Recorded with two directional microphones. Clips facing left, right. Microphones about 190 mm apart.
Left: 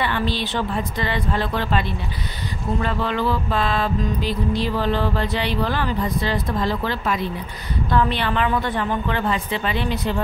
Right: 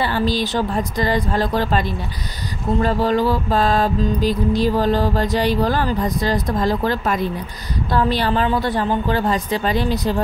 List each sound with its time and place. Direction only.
0.0 s music: 35° right (ahead or behind)